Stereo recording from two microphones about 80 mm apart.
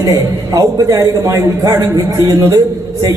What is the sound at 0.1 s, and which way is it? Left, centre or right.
A man's voice, right.